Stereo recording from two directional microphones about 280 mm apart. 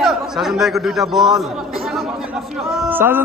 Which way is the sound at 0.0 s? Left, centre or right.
Centre.